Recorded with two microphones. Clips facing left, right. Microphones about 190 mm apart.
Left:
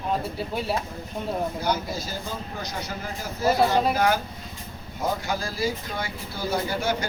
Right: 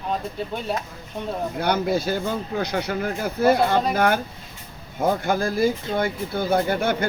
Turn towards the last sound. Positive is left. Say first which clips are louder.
# right 5 dB
turn(degrees=-55)  # may be behind; listen again after turning